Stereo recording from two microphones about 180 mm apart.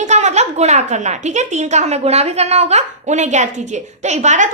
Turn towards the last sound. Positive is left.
turn(degrees=-40)  # may be behind; listen again after turning